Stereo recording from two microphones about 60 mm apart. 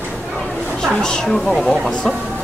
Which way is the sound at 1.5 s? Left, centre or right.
Centre.